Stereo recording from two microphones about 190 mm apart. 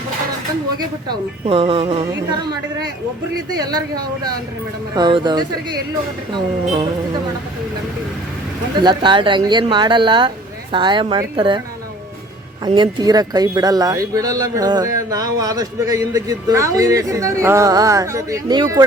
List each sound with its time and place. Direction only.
0.8 s speech: 25° right (ahead or behind)
3.6 s speech: 20° right (ahead or behind)
8.8 s speech: 25° right (ahead or behind)
12.6 s speech: 25° right (ahead or behind)